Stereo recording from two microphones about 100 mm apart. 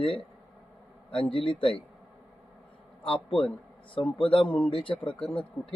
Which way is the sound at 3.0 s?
65° left (ahead or behind).